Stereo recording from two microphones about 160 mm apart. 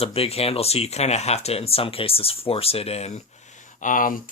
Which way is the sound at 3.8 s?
55° left (ahead or behind).